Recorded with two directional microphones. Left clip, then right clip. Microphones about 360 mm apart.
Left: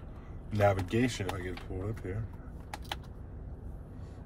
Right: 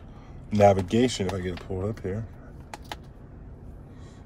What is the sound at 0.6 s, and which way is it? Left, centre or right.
Speech, centre.